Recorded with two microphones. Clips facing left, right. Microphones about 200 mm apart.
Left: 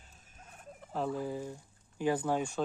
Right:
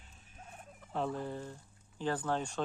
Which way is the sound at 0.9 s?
5° left (ahead or behind).